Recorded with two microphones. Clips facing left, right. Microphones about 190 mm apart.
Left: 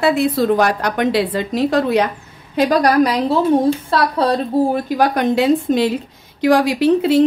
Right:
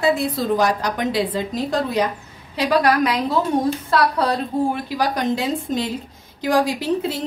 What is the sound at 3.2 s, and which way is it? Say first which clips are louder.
Speech: left 5 dB; 30° left (ahead or behind).